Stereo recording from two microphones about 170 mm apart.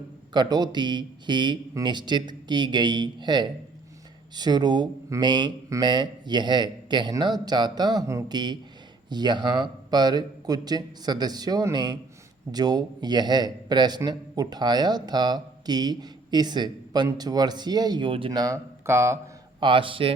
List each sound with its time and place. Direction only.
0.3 s a man's voice: 25° right (ahead or behind)
19.6 s speech: 30° right (ahead or behind)